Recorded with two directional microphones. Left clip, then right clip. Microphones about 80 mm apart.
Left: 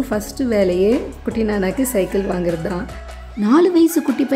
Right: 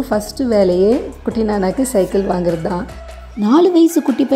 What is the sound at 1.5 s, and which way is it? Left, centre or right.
Speech, left.